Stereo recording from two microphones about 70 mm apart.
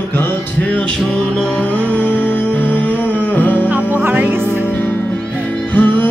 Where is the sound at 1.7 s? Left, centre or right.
Left.